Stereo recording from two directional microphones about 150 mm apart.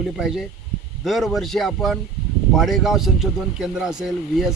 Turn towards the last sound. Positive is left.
turn(degrees=0)  # may be behind; listen again after turning